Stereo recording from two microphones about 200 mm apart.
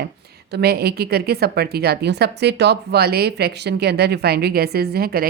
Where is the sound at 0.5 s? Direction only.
55° right (ahead or behind).